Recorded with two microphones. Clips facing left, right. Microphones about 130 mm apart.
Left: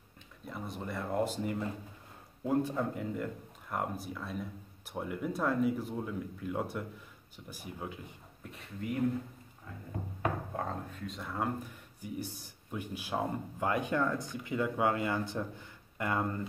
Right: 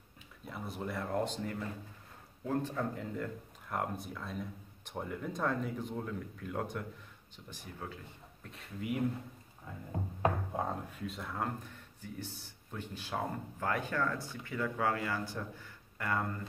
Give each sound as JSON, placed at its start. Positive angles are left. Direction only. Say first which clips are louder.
{"t": 0.5, "sound": "speech", "louder": "even", "side_deg": 0}
{"t": 8.5, "sound": "speech", "louder": "left 1 dB", "side_deg": 0}
{"t": 10.5, "sound": "speech", "louder": "right 1 dB", "side_deg": -15}
{"t": 11.1, "sound": "speech", "louder": "left 4 dB", "side_deg": 0}